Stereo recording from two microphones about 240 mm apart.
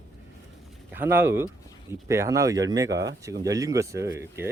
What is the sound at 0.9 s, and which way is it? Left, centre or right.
Speech, centre.